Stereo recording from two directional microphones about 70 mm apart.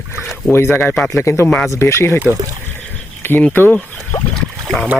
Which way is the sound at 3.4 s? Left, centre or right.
Left.